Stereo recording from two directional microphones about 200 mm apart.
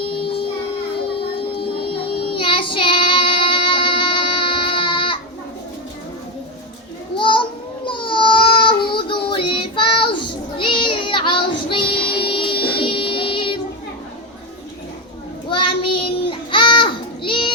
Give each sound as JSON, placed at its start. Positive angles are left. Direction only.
{"t": 1.9, "sound": "child singing", "side_deg": 25}
{"t": 7.2, "sound": "children playing", "side_deg": 25}
{"t": 7.9, "sound": "child singing", "side_deg": 25}
{"t": 15.4, "sound": "child singing", "side_deg": 25}